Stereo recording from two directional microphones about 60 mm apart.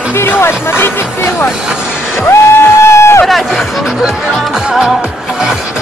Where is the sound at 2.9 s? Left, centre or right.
Left.